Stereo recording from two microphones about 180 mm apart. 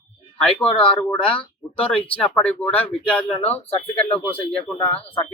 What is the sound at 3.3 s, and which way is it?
Speech, 35° left (ahead or behind).